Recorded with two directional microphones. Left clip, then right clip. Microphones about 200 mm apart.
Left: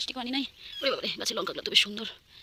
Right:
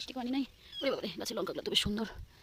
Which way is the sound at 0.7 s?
20° right (ahead or behind).